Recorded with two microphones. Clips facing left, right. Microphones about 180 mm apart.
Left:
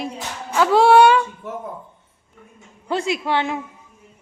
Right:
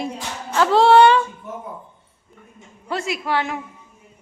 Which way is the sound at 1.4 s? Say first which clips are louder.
Left 3 dB; 75° left (ahead or behind).